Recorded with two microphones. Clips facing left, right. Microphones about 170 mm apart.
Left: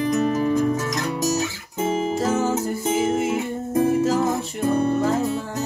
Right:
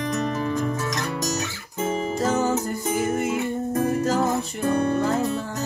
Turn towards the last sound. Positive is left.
turn(degrees=0)  # may be behind; listen again after turning